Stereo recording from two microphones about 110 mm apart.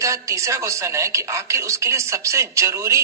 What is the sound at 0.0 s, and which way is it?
A woman's voice, 30° right (ahead or behind).